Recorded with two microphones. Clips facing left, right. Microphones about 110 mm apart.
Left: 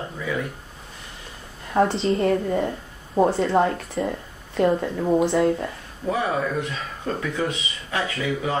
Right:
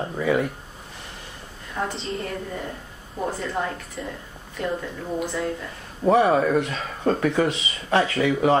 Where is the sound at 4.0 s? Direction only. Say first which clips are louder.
Left 7 dB; 40° left (ahead or behind).